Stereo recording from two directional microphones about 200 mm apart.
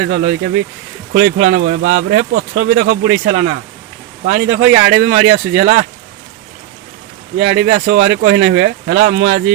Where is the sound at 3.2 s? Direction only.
60° right (ahead or behind).